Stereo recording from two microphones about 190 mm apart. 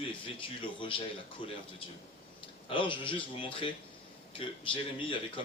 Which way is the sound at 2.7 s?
25° left (ahead or behind).